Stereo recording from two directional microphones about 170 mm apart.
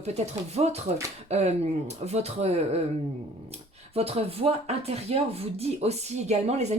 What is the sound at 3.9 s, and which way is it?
Speech, 35° right (ahead or behind).